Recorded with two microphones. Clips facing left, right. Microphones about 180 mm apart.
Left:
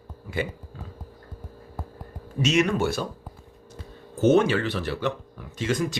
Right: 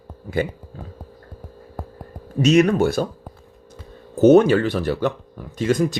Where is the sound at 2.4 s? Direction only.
40° right (ahead or behind).